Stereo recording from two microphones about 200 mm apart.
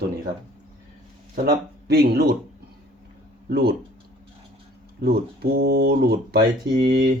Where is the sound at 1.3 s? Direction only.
50° right (ahead or behind).